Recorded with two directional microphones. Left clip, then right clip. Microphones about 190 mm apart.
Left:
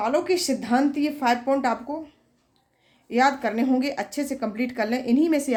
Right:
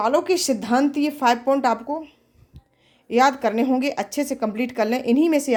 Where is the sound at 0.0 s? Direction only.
40° right (ahead or behind).